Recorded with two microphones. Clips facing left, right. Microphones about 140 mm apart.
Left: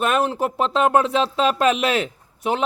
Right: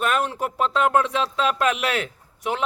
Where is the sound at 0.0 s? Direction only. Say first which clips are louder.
Left 3 dB; 25° left (ahead or behind).